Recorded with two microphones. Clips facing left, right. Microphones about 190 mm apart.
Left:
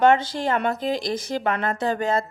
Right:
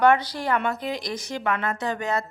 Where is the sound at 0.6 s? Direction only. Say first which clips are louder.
Left 3 dB; 35° left (ahead or behind).